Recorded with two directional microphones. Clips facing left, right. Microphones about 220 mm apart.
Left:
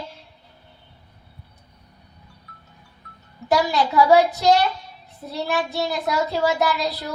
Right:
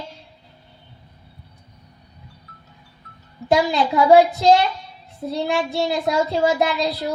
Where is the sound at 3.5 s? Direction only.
25° right (ahead or behind).